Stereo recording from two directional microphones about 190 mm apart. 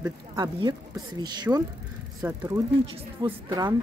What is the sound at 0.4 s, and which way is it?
Speech, 20° right (ahead or behind).